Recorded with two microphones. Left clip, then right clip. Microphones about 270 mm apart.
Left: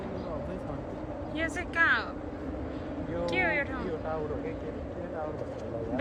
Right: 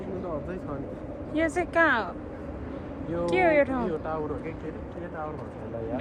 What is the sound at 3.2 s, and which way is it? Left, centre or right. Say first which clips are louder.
Speech: right 7 dB; centre.